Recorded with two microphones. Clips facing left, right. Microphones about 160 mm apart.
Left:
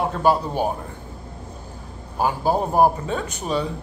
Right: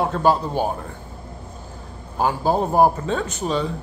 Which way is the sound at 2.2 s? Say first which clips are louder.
Right 1 dB; 10° left (ahead or behind).